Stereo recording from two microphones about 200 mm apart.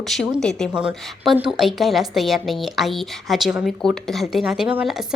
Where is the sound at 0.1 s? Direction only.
Centre (ahead or behind).